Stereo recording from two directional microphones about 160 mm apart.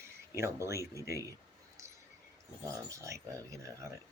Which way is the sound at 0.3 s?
15° right (ahead or behind).